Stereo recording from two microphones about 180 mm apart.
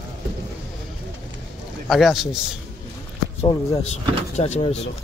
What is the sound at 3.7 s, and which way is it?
Speech, 40° left (ahead or behind).